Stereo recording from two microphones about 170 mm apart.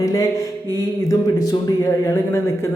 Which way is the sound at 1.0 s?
20° left (ahead or behind).